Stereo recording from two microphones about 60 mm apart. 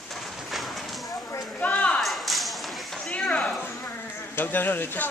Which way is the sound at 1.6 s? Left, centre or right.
Left.